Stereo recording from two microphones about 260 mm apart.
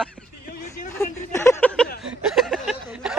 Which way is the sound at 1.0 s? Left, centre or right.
Centre.